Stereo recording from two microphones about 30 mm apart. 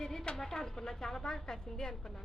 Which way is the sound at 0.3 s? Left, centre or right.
Centre.